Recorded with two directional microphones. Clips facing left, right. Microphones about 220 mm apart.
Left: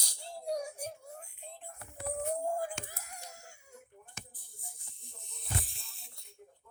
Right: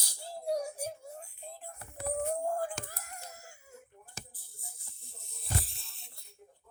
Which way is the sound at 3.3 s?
5° right (ahead or behind).